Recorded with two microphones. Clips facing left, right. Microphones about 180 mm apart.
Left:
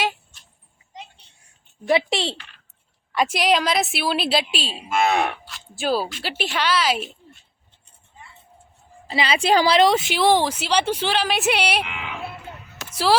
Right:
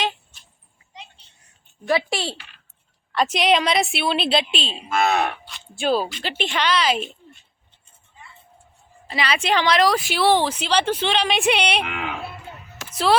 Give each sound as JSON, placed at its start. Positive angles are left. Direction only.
{"t": 1.9, "sound": "speech", "side_deg": 25}
{"t": 3.1, "sound": "a woman's voice", "side_deg": 10}
{"t": 9.0, "sound": "a woman's voice", "side_deg": 25}
{"t": 11.9, "sound": "speech", "side_deg": -50}